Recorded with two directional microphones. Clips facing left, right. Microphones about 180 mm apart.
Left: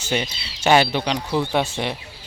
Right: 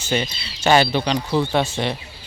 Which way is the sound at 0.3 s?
90° left.